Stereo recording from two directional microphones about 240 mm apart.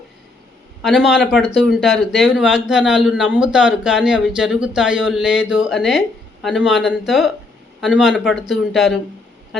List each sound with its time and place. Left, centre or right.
0.8 s speech: centre